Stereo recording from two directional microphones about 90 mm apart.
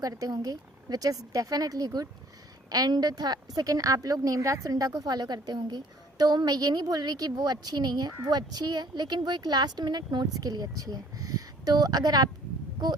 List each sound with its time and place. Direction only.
0.0 s a woman's voice: 45° right (ahead or behind)